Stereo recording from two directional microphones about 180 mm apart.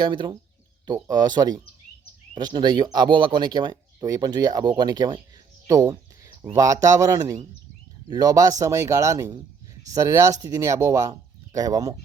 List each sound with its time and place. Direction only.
0.0 s speech: 25° right (ahead or behind)